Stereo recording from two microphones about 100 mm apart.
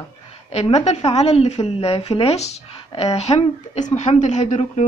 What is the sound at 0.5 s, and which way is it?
A woman's voice, 90° left.